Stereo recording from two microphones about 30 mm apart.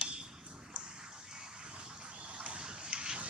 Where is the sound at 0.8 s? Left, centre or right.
Right.